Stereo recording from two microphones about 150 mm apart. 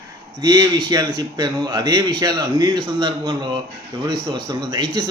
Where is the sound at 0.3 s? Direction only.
25° right (ahead or behind).